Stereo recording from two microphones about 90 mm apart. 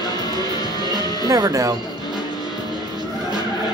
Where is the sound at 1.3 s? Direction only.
45° right (ahead or behind).